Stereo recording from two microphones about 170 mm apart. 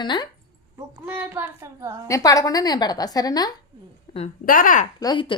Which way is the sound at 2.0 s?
20° left (ahead or behind).